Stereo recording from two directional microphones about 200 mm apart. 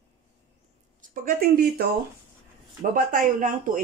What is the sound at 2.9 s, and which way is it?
Speech, 40° right (ahead or behind).